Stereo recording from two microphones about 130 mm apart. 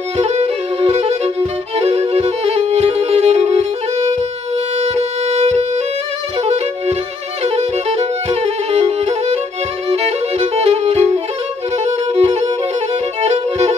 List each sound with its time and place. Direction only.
0.2 s violin: 55° right (ahead or behind)
4.8 s violin: 55° right (ahead or behind)
7.4 s music: 55° right (ahead or behind)
9.8 s violin: 50° right (ahead or behind)
11.8 s music: 55° right (ahead or behind)
13.2 s violin: 55° right (ahead or behind)